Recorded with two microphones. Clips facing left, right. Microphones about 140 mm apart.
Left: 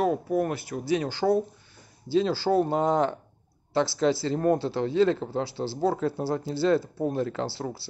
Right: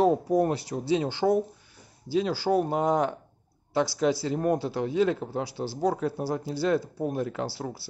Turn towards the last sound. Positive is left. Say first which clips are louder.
# left 2 dB
turn(degrees=-10)  # may be behind; listen again after turning